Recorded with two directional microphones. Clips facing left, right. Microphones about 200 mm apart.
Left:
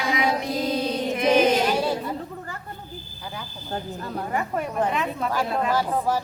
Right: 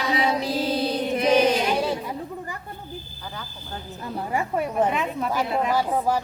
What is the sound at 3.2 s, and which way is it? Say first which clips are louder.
Smoke detector: left 4 dB; 10° left (ahead or behind).